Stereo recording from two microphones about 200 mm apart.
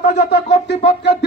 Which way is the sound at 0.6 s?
55° left (ahead or behind).